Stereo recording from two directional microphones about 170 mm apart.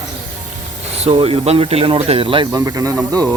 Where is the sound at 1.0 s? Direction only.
35° right (ahead or behind).